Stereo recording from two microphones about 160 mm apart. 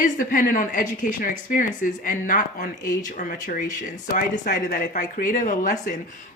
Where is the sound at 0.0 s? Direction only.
55° left (ahead or behind).